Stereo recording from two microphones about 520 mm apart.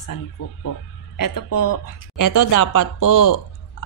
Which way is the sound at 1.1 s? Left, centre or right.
Left.